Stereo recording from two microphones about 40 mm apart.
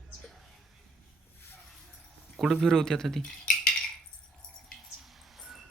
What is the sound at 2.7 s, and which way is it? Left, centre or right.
Speech, centre.